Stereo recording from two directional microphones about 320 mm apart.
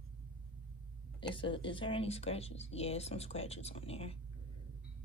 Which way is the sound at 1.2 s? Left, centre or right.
Centre.